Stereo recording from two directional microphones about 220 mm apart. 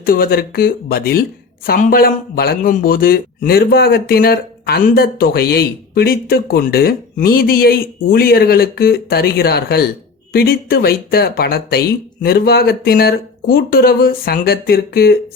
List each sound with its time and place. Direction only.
0.0 s a man's voice: 40° left (ahead or behind)